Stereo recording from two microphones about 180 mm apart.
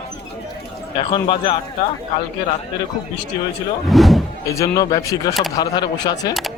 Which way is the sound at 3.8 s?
Centre (ahead or behind).